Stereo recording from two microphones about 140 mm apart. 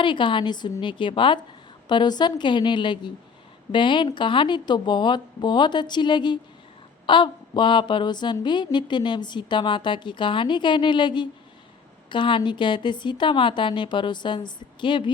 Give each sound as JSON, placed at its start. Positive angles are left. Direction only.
{"t": 0.0, "sound": "speech", "side_deg": 35}